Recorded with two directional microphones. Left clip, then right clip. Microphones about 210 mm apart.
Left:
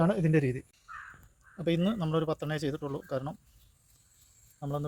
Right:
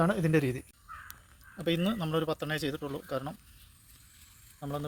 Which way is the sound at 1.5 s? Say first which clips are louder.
Left 1 dB; centre (ahead or behind).